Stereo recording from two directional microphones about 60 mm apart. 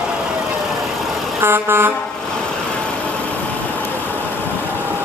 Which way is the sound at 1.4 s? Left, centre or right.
Right.